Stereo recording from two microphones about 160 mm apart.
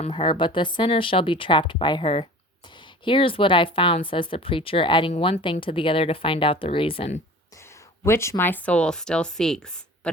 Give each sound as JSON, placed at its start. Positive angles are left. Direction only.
{"t": 0.0, "sound": "speech", "side_deg": 35}
{"t": 8.0, "sound": "speech", "side_deg": 15}